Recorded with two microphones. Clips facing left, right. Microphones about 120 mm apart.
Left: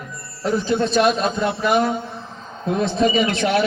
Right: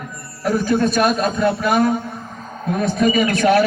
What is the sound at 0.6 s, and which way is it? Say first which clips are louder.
Speech: right 1 dB; 25° left (ahead or behind).